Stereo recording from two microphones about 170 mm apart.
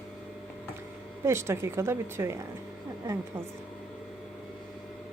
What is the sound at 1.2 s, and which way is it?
A woman's voice, 15° right (ahead or behind).